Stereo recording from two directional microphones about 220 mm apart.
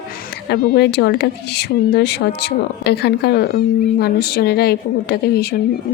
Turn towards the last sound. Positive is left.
turn(degrees=45)  # may be behind; listen again after turning